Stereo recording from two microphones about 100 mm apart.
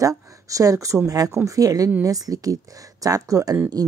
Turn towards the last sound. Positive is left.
turn(degrees=-35)  # may be behind; listen again after turning